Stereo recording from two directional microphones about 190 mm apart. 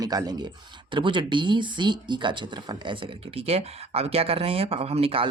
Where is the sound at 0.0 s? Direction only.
20° right (ahead or behind).